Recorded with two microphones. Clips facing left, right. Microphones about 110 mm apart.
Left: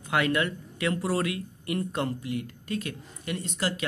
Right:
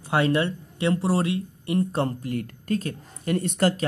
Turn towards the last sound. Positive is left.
turn(degrees=-55)  # may be behind; listen again after turning